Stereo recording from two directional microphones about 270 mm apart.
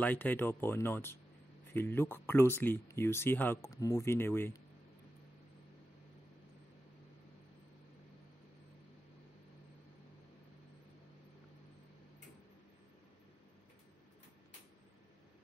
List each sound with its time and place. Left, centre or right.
0.0 s speech: centre